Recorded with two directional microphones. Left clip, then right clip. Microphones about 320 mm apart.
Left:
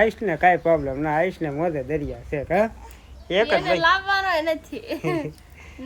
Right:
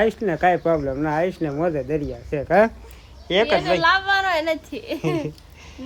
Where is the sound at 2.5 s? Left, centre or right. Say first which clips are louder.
Right 5 dB; right.